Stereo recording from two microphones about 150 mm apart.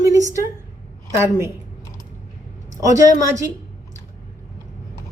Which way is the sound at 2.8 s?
20° right (ahead or behind).